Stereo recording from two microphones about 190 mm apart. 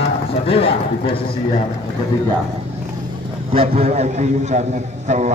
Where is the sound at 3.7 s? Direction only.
35° right (ahead or behind).